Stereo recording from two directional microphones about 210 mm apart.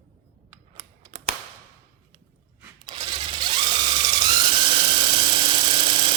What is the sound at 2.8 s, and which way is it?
Ratchet, 25° right (ahead or behind).